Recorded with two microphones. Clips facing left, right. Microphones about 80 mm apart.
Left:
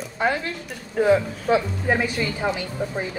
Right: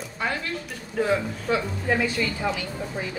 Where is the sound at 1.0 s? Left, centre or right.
Left.